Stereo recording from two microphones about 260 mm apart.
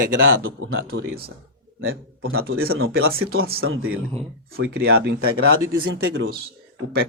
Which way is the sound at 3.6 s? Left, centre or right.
Right.